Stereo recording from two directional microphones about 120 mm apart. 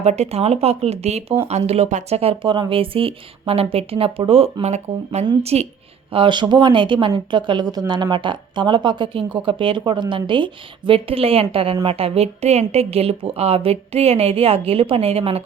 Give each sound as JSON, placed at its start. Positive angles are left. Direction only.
{"t": 0.0, "sound": "a woman's voice", "side_deg": -65}
{"t": 6.1, "sound": "a woman's voice", "side_deg": -45}